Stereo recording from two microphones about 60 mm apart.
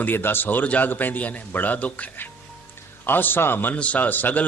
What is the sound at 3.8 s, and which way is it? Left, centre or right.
Speech, left.